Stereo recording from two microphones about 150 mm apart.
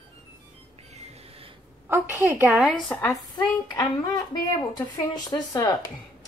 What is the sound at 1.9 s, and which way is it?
Speech, 15° right (ahead or behind).